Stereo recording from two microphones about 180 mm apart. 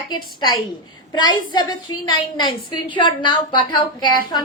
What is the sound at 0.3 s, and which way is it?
A woman's voice, 25° left (ahead or behind).